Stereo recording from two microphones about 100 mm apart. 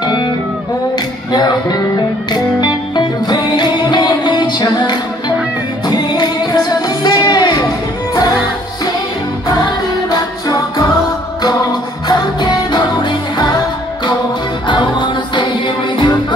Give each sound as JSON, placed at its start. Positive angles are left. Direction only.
{"t": 1.3, "sound": "music", "side_deg": 45}
{"t": 10.1, "sound": "music", "side_deg": 40}
{"t": 12.1, "sound": "music", "side_deg": 40}
{"t": 14.7, "sound": "music", "side_deg": 50}